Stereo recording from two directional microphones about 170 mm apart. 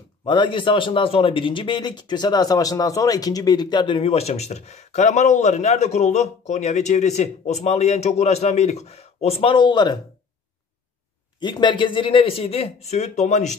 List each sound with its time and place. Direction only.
0.2 s speech: 30° left (ahead or behind)
11.3 s speech: 25° left (ahead or behind); by 13.6 s 45° left (ahead or behind)